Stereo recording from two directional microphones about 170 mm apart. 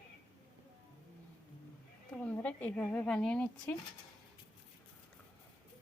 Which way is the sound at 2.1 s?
10° left (ahead or behind).